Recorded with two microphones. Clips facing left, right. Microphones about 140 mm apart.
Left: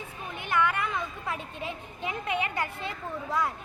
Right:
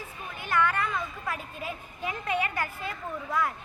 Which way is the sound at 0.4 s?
15° left (ahead or behind).